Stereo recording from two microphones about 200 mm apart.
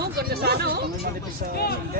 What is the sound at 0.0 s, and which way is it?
Chatter, 50° right (ahead or behind).